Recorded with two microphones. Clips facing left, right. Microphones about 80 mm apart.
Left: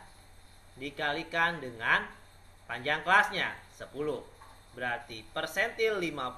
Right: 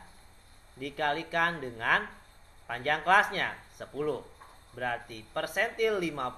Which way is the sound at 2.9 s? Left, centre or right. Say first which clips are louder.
Right 1 dB; right.